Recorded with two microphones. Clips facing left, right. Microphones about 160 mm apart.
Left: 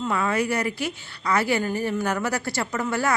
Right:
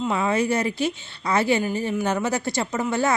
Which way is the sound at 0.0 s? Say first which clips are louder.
Right 2 dB; 20° right (ahead or behind).